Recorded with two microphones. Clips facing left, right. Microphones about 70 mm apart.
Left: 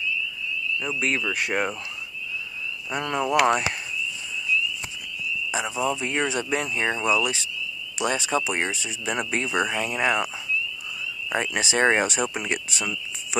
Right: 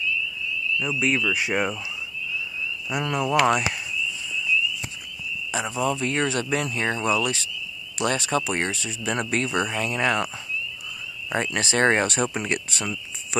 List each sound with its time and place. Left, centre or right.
0.8 s speech: centre
2.9 s speech: centre
3.2 s speech: centre
5.5 s speech: centre